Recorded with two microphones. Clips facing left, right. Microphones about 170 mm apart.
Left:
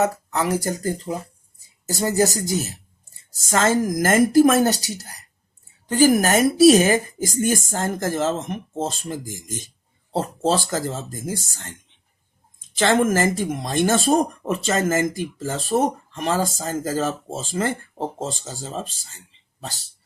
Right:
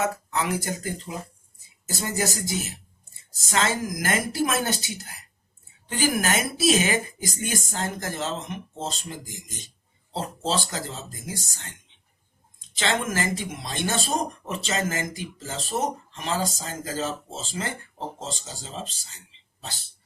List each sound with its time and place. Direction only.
0.0 s speech: 40° left (ahead or behind)
12.8 s speech: 50° left (ahead or behind)